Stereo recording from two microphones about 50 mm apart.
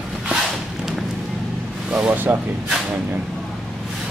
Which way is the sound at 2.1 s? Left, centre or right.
Right.